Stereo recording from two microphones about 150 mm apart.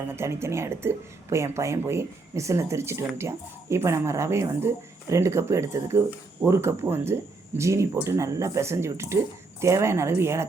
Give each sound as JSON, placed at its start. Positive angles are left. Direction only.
{"t": 0.2, "sound": "speech", "side_deg": -15}